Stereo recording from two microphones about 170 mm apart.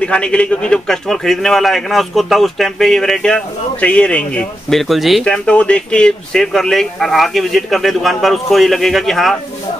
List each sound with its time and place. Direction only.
0.0 s a man's voice: 5° left (ahead or behind)